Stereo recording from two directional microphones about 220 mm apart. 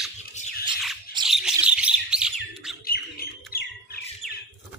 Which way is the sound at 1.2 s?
Centre (ahead or behind).